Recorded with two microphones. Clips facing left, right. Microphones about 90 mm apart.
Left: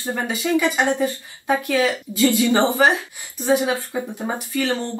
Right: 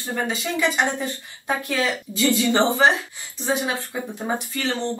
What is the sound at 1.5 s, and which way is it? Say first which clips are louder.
Speech: left 5 dB; 20° left (ahead or behind).